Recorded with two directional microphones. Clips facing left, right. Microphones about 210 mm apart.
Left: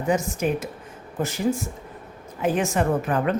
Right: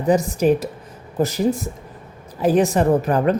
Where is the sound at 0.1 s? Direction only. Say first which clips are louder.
Right 7 dB; 35° right (ahead or behind).